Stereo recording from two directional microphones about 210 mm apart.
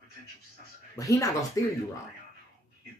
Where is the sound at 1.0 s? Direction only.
15° left (ahead or behind).